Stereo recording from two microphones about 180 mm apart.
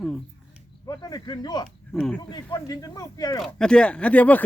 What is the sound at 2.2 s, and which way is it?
Speech, 20° left (ahead or behind).